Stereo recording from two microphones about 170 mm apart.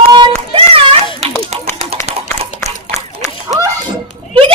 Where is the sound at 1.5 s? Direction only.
40° right (ahead or behind).